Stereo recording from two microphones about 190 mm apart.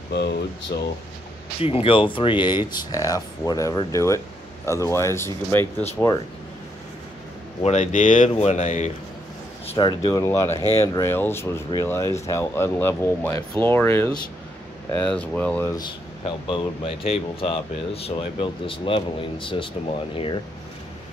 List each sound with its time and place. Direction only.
0.7 s speech: 55° left (ahead or behind)
1.6 s speech: 30° left (ahead or behind); by 5.9 s 15° left (ahead or behind)
7.6 s speech: 40° left (ahead or behind)
9.7 s speech: 25° left (ahead or behind); by 15.7 s 5° left (ahead or behind)
15.7 s speech: 25° left (ahead or behind)